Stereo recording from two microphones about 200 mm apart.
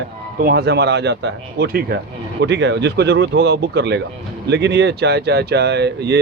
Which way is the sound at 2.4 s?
60° right (ahead or behind).